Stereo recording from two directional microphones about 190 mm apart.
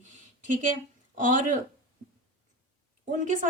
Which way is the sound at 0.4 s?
40° right (ahead or behind).